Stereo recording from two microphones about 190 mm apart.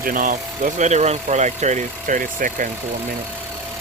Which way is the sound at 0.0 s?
45° right (ahead or behind).